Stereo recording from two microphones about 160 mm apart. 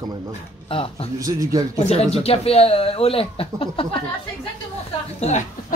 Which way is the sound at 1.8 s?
40° left (ahead or behind).